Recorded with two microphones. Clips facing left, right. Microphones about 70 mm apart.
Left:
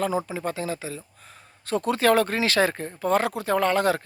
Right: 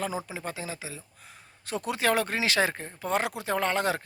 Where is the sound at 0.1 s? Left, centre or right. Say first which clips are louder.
Left 7 dB; left.